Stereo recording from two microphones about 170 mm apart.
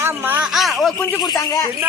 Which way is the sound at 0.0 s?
10° right (ahead or behind).